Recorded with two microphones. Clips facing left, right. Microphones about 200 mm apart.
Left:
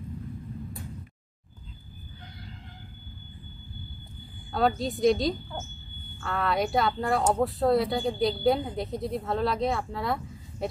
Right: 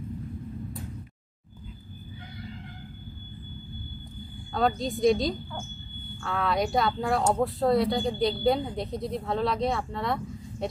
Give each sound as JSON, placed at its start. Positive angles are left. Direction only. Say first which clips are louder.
{"t": 4.6, "sound": "speech", "louder": "even", "side_deg": 0}